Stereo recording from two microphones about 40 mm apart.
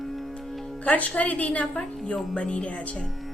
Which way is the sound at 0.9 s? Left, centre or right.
Left.